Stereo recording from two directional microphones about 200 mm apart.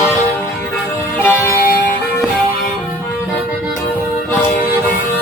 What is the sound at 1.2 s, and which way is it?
Music, 10° left (ahead or behind).